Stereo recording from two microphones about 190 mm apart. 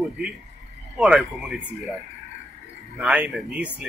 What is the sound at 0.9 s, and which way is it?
Speech, 5° right (ahead or behind).